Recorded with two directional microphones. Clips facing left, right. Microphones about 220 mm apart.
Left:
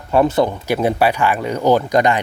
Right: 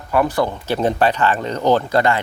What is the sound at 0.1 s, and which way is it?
Speech, 25° left (ahead or behind).